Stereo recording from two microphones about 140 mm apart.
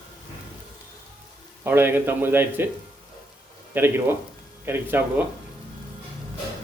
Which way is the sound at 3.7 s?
15° right (ahead or behind).